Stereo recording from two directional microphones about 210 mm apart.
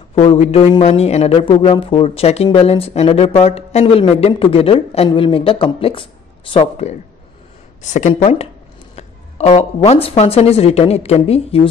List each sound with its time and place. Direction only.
0.1 s speech: 30° left (ahead or behind)